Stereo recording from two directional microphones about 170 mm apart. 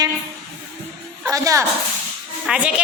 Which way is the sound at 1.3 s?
20° right (ahead or behind).